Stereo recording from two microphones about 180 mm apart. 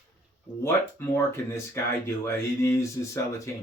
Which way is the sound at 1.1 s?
15° left (ahead or behind).